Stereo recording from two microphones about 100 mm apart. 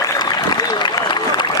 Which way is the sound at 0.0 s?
45° left (ahead or behind).